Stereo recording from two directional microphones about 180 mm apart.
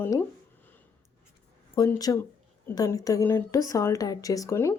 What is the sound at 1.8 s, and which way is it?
A woman's voice, 20° left (ahead or behind).